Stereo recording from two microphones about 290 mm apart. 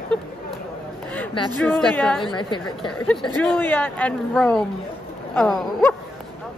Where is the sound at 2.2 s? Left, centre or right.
Centre.